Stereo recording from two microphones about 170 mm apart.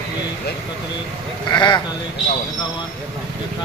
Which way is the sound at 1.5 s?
25° left (ahead or behind).